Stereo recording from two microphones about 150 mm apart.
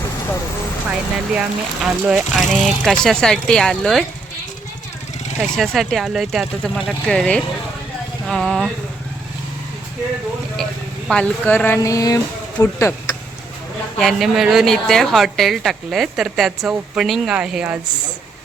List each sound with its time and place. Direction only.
1.4 s speech: 5° right (ahead or behind)
5.5 s speech: centre (ahead or behind)
11.1 s speech: 10° left (ahead or behind)
14.0 s speech: centre (ahead or behind)